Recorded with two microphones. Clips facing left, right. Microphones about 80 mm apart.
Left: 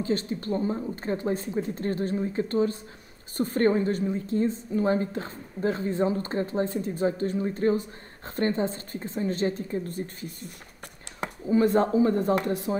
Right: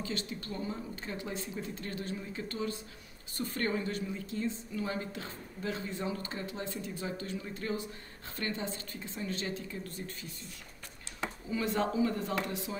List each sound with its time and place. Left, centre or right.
0.0 s a woman's voice: left
11.1 s a sound: left
11.5 s a woman's voice: left